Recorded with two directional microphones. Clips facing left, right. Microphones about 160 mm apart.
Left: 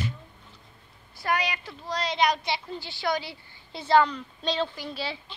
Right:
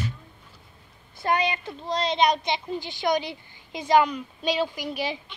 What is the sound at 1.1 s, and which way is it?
A child's voice, 25° right (ahead or behind).